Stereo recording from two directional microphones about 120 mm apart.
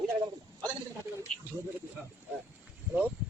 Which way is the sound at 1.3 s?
5° left (ahead or behind).